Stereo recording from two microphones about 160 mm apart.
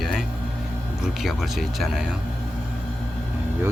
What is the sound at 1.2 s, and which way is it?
Speech, centre (ahead or behind).